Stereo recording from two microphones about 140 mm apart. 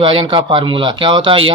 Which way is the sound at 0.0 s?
40° right (ahead or behind).